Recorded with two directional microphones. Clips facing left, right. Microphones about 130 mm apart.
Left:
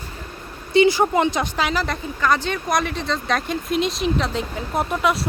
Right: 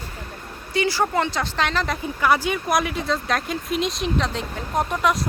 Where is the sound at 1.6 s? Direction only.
5° left (ahead or behind).